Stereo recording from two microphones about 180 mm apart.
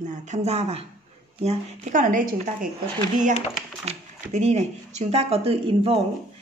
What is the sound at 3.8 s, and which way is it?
Speech, 40° right (ahead or behind).